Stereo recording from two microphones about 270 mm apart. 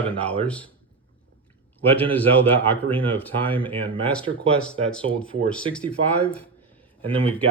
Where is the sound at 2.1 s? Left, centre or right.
Centre.